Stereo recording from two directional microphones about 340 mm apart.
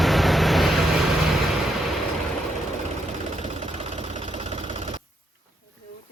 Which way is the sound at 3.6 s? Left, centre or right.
Centre.